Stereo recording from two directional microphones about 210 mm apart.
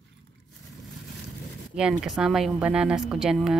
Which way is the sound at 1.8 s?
5° right (ahead or behind).